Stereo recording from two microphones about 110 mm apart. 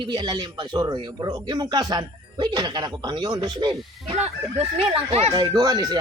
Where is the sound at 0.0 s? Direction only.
40° right (ahead or behind).